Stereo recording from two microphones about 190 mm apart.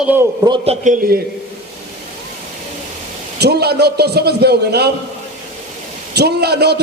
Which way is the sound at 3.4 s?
60° right (ahead or behind).